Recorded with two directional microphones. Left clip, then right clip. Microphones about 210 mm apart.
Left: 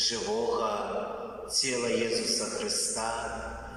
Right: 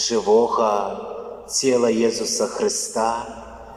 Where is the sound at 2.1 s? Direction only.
90° right.